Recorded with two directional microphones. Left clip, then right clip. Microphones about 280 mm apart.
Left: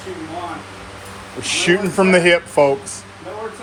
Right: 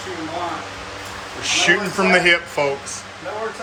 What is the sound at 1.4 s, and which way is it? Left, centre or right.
Speech, centre.